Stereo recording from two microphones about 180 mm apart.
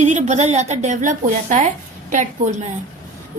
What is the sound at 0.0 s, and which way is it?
A woman's voice, 40° right (ahead or behind).